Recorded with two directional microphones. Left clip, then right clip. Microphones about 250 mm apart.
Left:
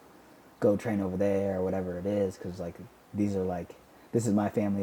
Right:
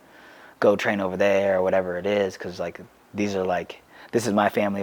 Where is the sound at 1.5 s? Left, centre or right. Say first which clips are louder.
Right 10 dB; centre.